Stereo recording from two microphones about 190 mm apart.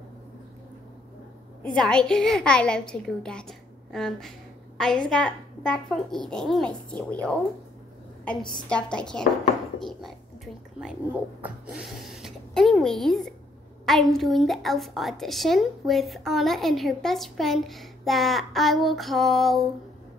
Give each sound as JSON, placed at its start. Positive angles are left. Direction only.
{"t": 1.6, "sound": "a woman's voice", "side_deg": 5}
{"t": 8.4, "sound": "a woman's voice", "side_deg": 25}
{"t": 8.6, "sound": "a woman's voice", "side_deg": 5}